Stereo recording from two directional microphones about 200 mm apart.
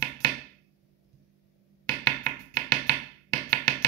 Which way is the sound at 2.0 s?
15° left (ahead or behind).